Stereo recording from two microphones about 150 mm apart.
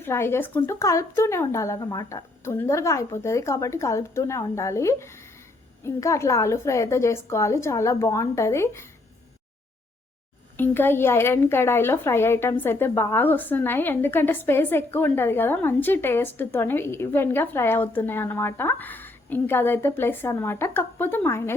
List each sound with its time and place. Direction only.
0.0 s speech: 15° left (ahead or behind)
10.6 s a woman's voice: 15° left (ahead or behind)